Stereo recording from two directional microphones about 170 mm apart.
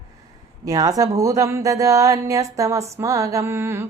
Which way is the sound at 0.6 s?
20° right (ahead or behind).